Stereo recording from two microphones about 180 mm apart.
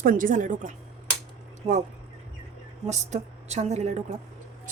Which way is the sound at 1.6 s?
30° right (ahead or behind).